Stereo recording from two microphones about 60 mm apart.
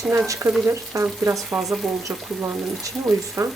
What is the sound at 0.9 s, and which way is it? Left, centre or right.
Speech, right.